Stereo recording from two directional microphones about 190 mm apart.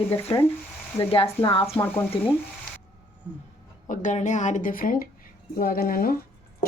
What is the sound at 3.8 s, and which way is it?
Speech, 40° left (ahead or behind).